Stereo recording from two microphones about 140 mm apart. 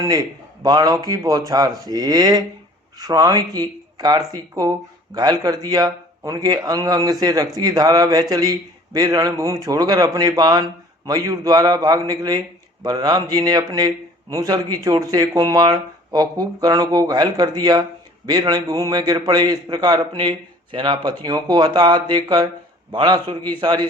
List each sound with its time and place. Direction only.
0.0 s a man's voice: 25° right (ahead or behind)